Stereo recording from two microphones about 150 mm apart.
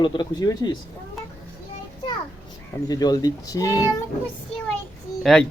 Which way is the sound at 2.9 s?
25° left (ahead or behind).